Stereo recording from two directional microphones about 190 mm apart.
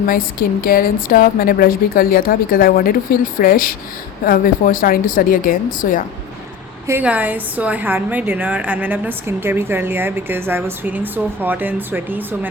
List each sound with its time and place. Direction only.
0.0 s speech: 50° left (ahead or behind)
6.8 s a woman's voice: 10° right (ahead or behind)